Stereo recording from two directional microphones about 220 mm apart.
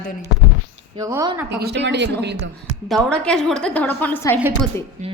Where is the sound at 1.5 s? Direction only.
50° right (ahead or behind).